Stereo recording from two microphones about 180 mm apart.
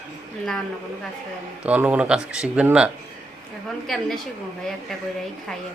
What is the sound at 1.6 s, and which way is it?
Speech, 10° right (ahead or behind).